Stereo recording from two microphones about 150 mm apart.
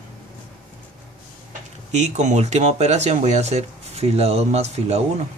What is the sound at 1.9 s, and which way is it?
Speech, 50° right (ahead or behind).